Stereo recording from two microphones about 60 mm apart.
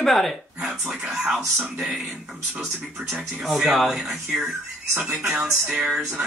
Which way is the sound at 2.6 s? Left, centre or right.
Centre.